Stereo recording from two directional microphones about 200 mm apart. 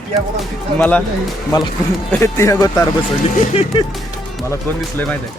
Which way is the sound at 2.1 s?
15° left (ahead or behind).